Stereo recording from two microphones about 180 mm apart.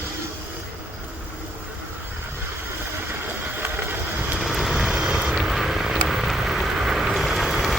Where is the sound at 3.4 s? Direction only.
10° right (ahead or behind).